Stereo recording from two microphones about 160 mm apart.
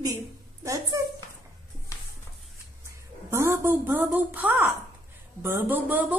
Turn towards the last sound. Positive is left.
turn(degrees=-10)  # may be behind; listen again after turning